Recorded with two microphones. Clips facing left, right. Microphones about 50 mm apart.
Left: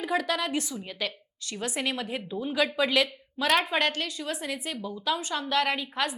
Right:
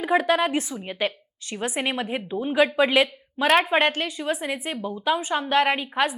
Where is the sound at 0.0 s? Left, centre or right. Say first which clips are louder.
Right 7 dB; right.